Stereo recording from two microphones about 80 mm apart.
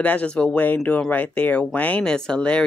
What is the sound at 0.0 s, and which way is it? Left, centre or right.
Speech, centre.